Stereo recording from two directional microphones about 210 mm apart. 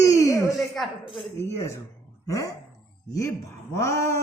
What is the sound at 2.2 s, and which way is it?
Speech, 15° left (ahead or behind).